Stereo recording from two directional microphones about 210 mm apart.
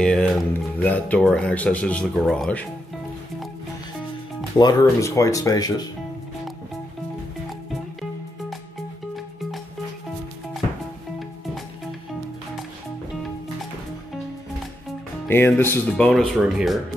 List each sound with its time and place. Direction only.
0.0 s speech: 5° left (ahead or behind)
4.6 s speech: 15° left (ahead or behind)
15.2 s speech: 10° left (ahead or behind)
16.1 s speech: centre (ahead or behind)